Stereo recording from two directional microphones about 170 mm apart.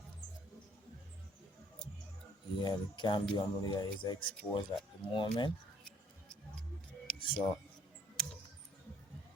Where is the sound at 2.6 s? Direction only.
25° left (ahead or behind).